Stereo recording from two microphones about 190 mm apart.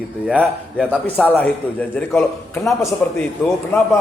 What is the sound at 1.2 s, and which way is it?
A man's voice, 10° left (ahead or behind).